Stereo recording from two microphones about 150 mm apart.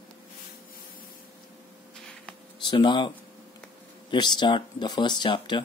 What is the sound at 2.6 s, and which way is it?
Speech, 30° left (ahead or behind).